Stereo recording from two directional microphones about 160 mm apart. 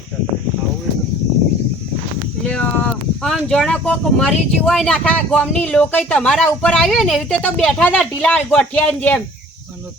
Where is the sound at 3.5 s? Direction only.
5° left (ahead or behind).